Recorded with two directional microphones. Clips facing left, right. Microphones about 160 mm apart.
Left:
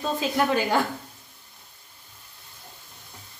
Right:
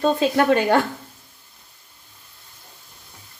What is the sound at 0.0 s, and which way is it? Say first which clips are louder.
Speech: right 6 dB; 75° right (ahead or behind).